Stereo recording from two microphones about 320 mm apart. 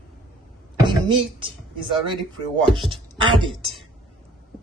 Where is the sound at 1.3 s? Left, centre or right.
Centre.